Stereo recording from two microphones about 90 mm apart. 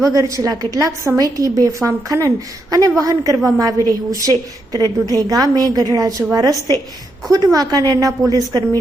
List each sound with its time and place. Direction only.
0.0 s a woman's voice: 35° right (ahead or behind)